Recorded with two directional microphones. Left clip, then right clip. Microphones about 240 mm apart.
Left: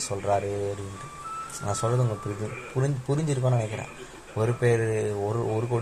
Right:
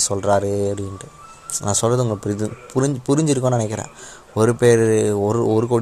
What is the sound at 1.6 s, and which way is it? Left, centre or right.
A man's voice, right.